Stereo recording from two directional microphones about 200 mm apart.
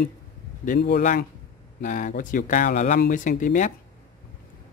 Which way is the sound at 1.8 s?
40° left (ahead or behind).